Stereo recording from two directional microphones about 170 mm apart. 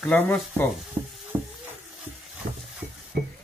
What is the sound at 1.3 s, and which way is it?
Sizzle, 15° right (ahead or behind).